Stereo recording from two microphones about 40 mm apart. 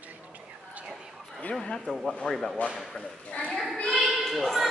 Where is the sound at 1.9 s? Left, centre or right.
Centre.